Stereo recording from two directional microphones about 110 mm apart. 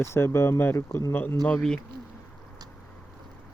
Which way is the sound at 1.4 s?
5° left (ahead or behind).